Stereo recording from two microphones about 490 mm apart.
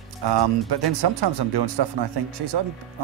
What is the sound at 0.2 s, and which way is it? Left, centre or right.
Speech, right.